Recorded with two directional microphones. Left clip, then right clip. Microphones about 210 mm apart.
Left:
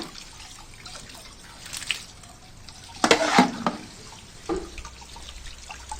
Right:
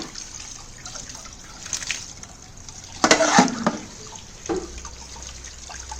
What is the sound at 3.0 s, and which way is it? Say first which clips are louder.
Stir: right 3 dB; centre (ahead or behind).